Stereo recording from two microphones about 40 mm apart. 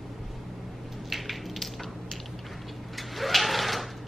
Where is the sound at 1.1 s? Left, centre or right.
Centre.